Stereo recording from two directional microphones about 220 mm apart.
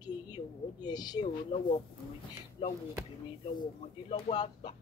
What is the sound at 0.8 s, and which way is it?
Speech, 20° left (ahead or behind).